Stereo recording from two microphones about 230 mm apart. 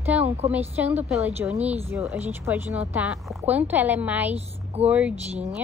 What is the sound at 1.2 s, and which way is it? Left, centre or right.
Speech, centre.